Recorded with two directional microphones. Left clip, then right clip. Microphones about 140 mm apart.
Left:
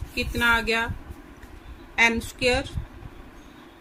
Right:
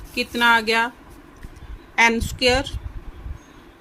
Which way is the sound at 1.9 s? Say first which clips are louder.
Right 4 dB; 35° right (ahead or behind).